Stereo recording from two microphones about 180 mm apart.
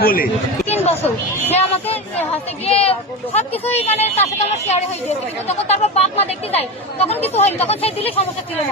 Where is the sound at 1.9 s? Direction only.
35° left (ahead or behind).